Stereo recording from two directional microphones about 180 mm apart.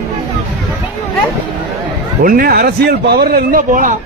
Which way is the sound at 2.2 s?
55° right (ahead or behind).